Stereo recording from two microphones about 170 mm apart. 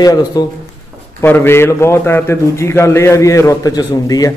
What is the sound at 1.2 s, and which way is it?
A man's voice, 10° left (ahead or behind).